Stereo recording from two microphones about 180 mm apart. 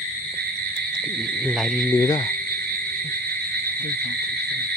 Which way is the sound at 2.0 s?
20° left (ahead or behind).